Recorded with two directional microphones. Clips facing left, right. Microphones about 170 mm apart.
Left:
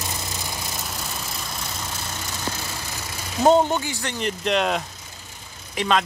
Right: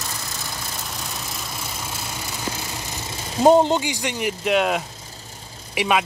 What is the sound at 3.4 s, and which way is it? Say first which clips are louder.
Speech: right 2 dB; 15° right (ahead or behind).